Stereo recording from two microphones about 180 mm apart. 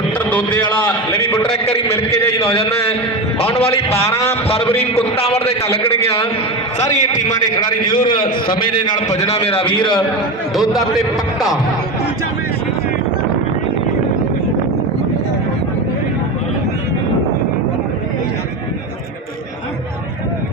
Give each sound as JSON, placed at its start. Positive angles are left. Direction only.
{"t": 0.3, "sound": "a man's voice", "side_deg": 10}
{"t": 1.4, "sound": "a man's voice", "side_deg": 30}
{"t": 2.0, "sound": "a man's voice", "side_deg": 15}
{"t": 3.3, "sound": "a man's voice", "side_deg": 30}
{"t": 3.9, "sound": "a man's voice", "side_deg": 15}
{"t": 4.4, "sound": "a man's voice", "side_deg": 35}
{"t": 7.2, "sound": "a man's voice", "side_deg": 45}
{"t": 7.5, "sound": "a man's voice", "side_deg": 25}
{"t": 10.5, "sound": "a man's voice", "side_deg": 0}